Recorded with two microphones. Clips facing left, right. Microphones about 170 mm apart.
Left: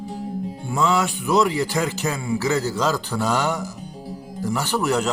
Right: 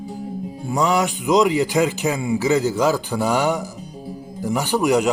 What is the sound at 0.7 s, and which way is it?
A man's voice, 15° right (ahead or behind).